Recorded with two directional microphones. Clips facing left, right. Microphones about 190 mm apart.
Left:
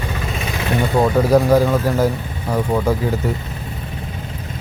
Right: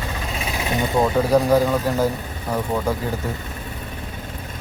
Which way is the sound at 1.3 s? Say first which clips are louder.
Left 3 dB; 10° left (ahead or behind).